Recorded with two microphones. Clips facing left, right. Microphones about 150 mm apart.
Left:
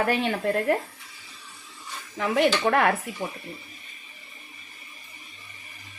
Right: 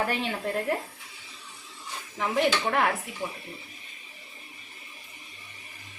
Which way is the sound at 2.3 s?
90° left.